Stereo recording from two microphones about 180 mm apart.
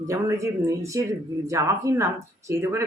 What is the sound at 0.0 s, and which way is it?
Speech, 15° right (ahead or behind).